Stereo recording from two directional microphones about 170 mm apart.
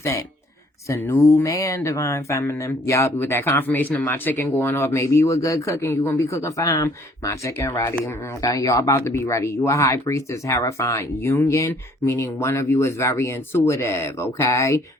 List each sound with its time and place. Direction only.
0.9 s speech: 15° left (ahead or behind)